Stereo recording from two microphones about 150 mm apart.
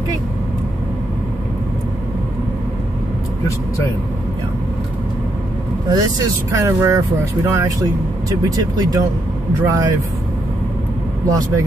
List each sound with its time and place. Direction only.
5.9 s speech: 25° right (ahead or behind)
11.2 s speech: 25° right (ahead or behind)